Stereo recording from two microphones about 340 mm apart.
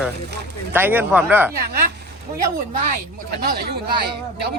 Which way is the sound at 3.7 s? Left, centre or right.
Right.